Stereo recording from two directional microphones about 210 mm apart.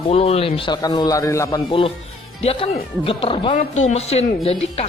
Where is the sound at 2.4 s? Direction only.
30° left (ahead or behind).